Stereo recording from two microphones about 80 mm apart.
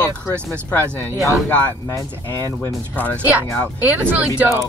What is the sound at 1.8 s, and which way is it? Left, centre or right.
Speech, left.